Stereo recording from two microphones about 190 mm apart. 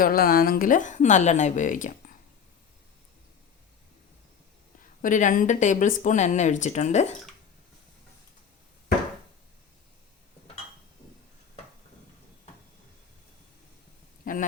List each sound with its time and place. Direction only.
0.0 s a woman's voice: 50° left (ahead or behind)
5.0 s speech: 45° left (ahead or behind)
14.3 s a sound: 45° left (ahead or behind)